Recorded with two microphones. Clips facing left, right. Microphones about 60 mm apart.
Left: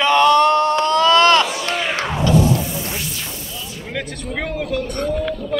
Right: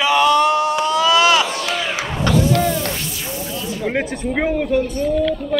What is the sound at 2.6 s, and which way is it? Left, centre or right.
Music, right.